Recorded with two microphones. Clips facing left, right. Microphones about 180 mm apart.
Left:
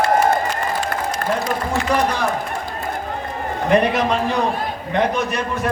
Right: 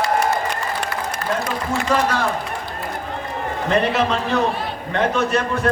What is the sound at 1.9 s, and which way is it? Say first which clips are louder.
Speech: even; 15° left (ahead or behind).